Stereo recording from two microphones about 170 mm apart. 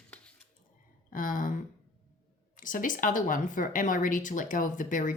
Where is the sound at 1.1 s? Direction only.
50° left (ahead or behind).